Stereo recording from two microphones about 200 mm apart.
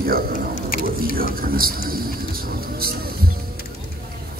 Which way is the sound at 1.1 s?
45° right (ahead or behind).